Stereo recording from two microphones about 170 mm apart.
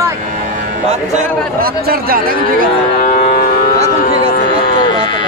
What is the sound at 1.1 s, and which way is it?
Speech, 45° right (ahead or behind).